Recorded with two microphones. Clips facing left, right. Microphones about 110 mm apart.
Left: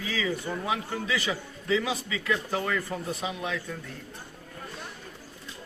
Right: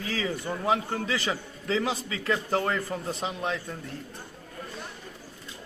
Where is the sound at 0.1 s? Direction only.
40° right (ahead or behind).